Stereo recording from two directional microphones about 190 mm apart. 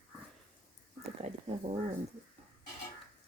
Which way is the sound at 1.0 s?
35° right (ahead or behind).